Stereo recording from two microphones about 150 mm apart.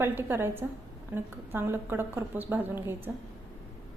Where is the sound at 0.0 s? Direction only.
15° right (ahead or behind).